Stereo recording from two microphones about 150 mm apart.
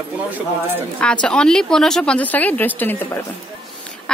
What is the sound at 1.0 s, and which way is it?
A woman's voice, 5° left (ahead or behind).